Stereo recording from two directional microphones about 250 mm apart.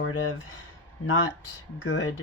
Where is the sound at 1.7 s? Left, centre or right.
Left.